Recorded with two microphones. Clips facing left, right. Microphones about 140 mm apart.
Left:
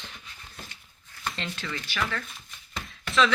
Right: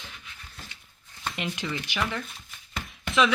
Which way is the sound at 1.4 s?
20° right (ahead or behind).